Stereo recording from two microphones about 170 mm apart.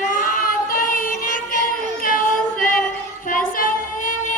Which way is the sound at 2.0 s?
55° left (ahead or behind).